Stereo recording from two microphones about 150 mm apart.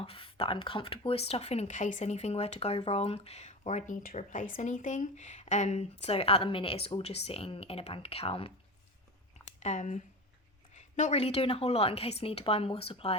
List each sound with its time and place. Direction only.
0.0 s speech: 35° left (ahead or behind)
9.6 s a woman's voice: 55° left (ahead or behind)